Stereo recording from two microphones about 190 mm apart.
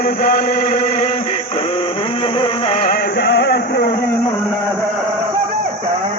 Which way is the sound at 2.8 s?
55° left (ahead or behind).